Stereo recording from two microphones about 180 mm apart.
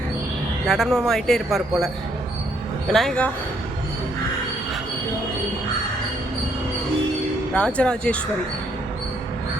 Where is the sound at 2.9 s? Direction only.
5° left (ahead or behind).